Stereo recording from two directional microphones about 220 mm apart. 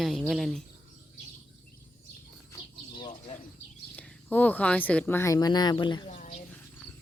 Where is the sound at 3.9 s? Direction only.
5° left (ahead or behind).